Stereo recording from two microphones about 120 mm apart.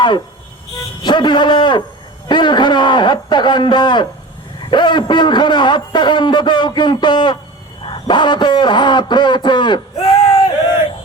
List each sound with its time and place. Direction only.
1.0 s a man's voice: 40° left (ahead or behind)